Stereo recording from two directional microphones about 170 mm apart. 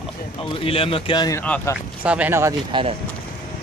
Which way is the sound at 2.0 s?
10° right (ahead or behind).